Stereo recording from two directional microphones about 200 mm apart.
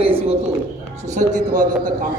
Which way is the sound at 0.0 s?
30° right (ahead or behind).